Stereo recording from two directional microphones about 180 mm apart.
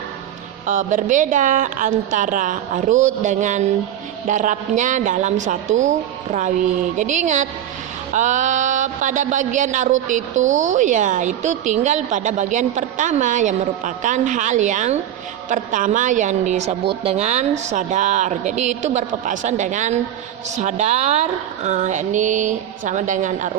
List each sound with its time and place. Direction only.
0.6 s a woman's voice: 45° right (ahead or behind)